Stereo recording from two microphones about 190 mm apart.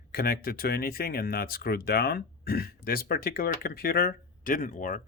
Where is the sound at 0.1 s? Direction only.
55° left (ahead or behind).